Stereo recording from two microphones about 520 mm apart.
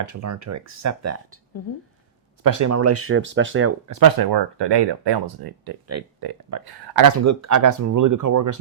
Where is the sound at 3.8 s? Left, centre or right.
Right.